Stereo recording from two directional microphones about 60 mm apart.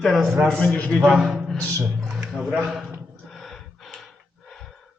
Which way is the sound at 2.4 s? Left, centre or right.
Centre.